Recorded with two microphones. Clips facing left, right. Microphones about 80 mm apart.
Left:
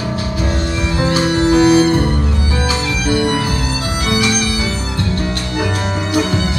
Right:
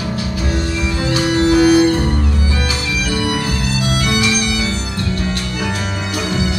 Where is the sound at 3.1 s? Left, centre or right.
Left.